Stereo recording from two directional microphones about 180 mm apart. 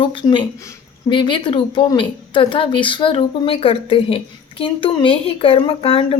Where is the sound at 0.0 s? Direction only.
25° left (ahead or behind).